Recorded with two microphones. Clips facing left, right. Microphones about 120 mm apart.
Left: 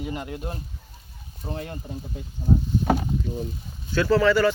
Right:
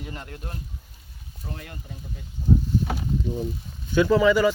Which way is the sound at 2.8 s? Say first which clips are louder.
Left 7 dB; 50° left (ahead or behind).